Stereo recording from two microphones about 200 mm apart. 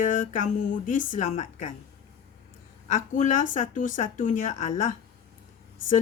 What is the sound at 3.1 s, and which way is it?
Speech, 40° left (ahead or behind).